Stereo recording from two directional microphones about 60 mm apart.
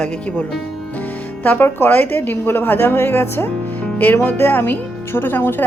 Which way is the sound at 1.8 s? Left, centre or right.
Left.